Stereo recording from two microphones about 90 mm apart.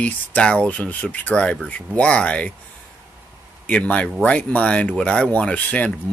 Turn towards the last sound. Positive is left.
turn(degrees=15)  # may be behind; listen again after turning